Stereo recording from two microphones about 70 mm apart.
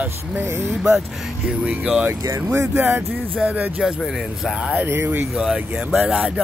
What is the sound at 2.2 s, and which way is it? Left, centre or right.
Speech, right.